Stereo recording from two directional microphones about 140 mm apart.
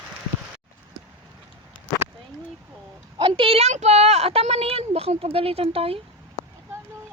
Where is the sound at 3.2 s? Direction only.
40° right (ahead or behind).